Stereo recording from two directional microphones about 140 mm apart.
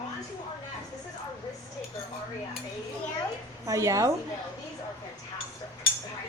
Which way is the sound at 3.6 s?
25° right (ahead or behind).